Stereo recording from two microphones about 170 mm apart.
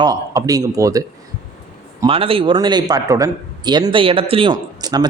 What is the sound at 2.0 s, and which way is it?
A man's voice, 35° right (ahead or behind).